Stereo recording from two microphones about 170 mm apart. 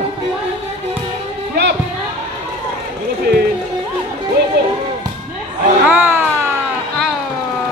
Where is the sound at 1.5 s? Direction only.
75° right (ahead or behind).